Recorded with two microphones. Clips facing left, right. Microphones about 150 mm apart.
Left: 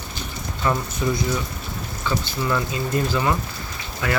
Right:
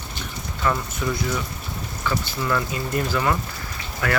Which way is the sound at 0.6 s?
20° left (ahead or behind).